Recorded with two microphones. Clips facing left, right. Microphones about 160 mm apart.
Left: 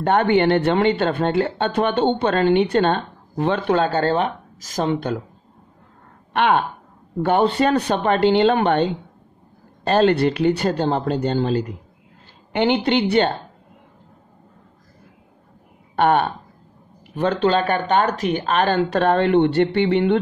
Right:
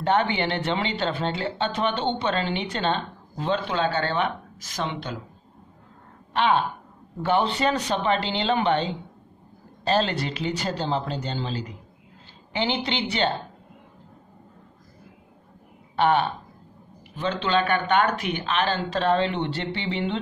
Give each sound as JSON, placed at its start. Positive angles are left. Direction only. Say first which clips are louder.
{"t": 0.0, "sound": "speech", "louder": "left 6 dB", "side_deg": 55}
{"t": 6.3, "sound": "speech", "louder": "left 4 dB", "side_deg": 60}
{"t": 7.2, "sound": "speech", "louder": "left 6 dB", "side_deg": 50}
{"t": 16.0, "sound": "speech", "louder": "left 4 dB", "side_deg": 50}